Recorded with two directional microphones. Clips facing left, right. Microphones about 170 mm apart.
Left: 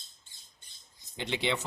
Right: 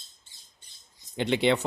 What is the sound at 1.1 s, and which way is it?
Speech, 60° right (ahead or behind).